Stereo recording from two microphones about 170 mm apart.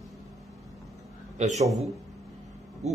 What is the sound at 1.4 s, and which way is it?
Speech, 40° right (ahead or behind).